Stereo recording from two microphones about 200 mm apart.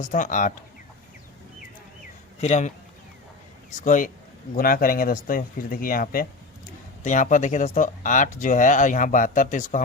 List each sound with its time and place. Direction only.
0.0 s speech: 40° left (ahead or behind)
2.4 s speech: 35° left (ahead or behind)
3.8 s speech: 40° left (ahead or behind)